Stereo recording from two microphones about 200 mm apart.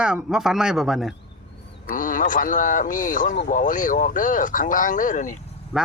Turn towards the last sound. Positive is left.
turn(degrees=-5)  # may be behind; listen again after turning